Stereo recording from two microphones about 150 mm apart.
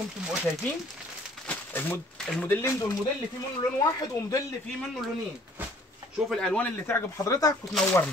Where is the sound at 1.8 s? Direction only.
10° left (ahead or behind).